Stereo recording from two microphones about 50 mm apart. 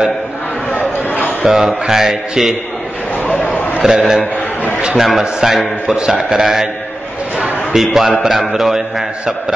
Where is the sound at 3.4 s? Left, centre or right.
Left.